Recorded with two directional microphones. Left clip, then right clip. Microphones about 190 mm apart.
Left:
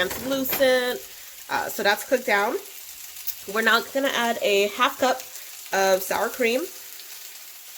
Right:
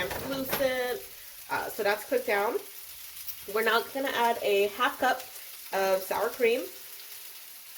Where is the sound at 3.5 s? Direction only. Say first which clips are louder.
Left 6 dB; 55° left (ahead or behind).